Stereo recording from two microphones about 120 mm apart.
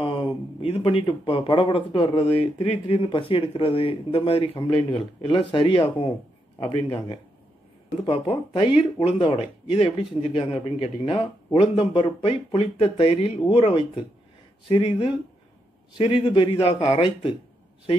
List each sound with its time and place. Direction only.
0.0 s speech: 50° left (ahead or behind)